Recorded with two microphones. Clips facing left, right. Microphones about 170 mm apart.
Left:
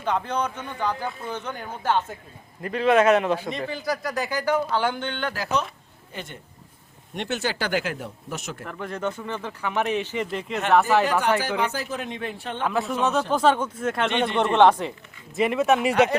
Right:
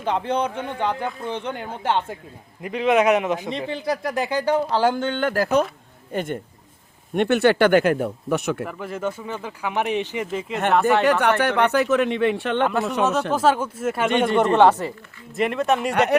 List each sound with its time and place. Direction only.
0.0 s speech: 30° right (ahead or behind)
2.6 s speech: 15° right (ahead or behind); by 8.6 s 60° right (ahead or behind)
8.6 s speech: 5° right (ahead or behind)
10.7 s speech: centre (ahead or behind)
11.0 s speech: 65° right (ahead or behind)
12.9 s speech: centre (ahead or behind)